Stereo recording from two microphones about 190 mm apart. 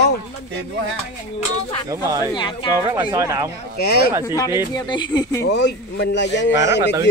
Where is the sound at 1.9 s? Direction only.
20° right (ahead or behind).